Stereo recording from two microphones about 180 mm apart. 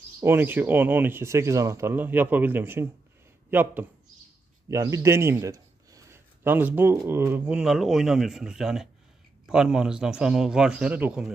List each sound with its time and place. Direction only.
0.2 s a man's voice: 10° right (ahead or behind)